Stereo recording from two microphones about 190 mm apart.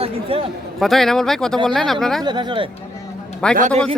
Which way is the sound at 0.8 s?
Centre (ahead or behind).